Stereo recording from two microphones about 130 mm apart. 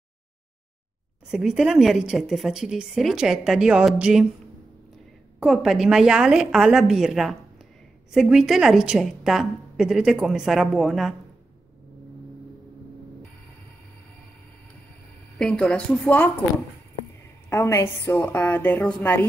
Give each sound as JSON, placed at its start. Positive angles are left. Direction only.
{"t": 1.2, "sound": "a woman's voice", "side_deg": -5}
{"t": 5.4, "sound": "a woman's voice", "side_deg": -5}
{"t": 15.3, "sound": "a woman's voice", "side_deg": 5}
{"t": 17.5, "sound": "a woman's voice", "side_deg": 20}